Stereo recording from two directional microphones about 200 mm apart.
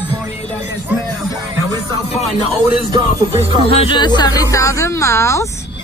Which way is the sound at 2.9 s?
30° right (ahead or behind).